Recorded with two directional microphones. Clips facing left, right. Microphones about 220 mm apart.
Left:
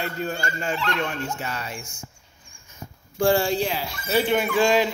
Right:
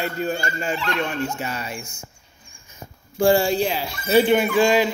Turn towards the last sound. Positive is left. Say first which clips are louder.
# right 2 dB
turn(degrees=-5)  # may be behind; listen again after turning